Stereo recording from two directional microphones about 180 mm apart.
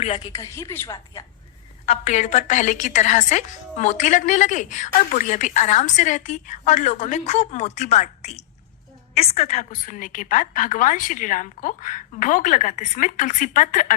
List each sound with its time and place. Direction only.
0.2 s a woman's voice: 20° left (ahead or behind)
1.9 s a woman's voice: 40° left (ahead or behind)